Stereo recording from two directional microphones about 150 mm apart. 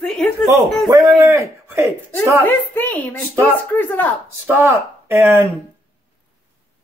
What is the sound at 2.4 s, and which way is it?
Speech, 10° left (ahead or behind).